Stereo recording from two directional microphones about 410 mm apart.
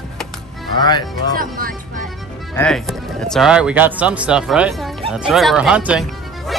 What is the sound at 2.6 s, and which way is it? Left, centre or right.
Speech, centre.